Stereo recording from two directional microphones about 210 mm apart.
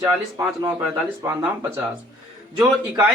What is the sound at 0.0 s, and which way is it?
Speech, 15° right (ahead or behind).